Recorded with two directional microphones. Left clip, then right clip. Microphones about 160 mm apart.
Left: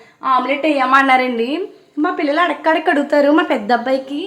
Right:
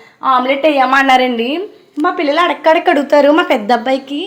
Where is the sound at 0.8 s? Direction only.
10° right (ahead or behind).